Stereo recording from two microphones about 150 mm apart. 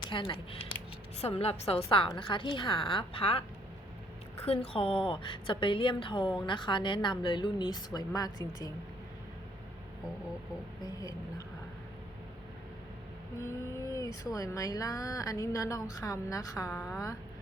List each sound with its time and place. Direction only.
0.1 s a woman's voice: 35° left (ahead or behind)
10.8 s speech: 25° left (ahead or behind)
13.4 s speech: 20° left (ahead or behind)